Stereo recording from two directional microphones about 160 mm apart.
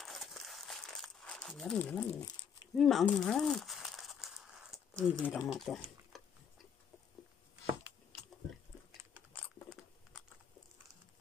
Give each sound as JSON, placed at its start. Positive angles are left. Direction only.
{"t": 0.0, "sound": "crumpling", "side_deg": 0}
{"t": 2.1, "sound": "dog", "side_deg": 25}
{"t": 2.8, "sound": "crumpling", "side_deg": 0}
{"t": 5.5, "sound": "a sound", "side_deg": 0}
{"t": 9.7, "sound": "crunch", "side_deg": 5}